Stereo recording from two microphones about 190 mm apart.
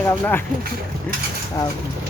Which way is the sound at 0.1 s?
10° left (ahead or behind).